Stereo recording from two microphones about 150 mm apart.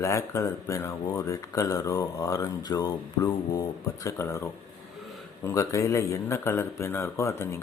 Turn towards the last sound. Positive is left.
turn(degrees=15)  # may be behind; listen again after turning